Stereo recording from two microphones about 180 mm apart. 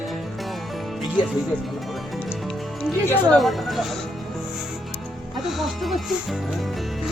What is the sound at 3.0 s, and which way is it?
Speech, 10° left (ahead or behind).